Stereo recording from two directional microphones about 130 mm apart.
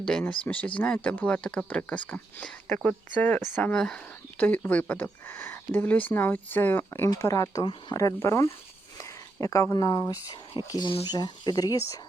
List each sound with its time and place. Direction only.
0.0 s speech: 5° left (ahead or behind); by 11.8 s 30° left (ahead or behind)